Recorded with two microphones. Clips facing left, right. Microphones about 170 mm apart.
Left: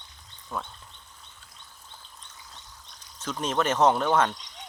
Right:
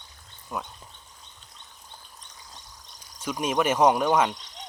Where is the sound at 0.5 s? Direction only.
10° right (ahead or behind).